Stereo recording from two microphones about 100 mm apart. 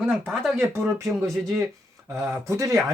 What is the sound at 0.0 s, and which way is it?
Speech, 5° left (ahead or behind).